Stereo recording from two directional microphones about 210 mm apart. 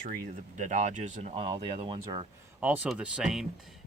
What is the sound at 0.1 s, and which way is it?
Speech, 35° right (ahead or behind).